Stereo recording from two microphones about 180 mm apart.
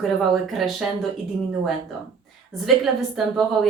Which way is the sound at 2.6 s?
Centre (ahead or behind).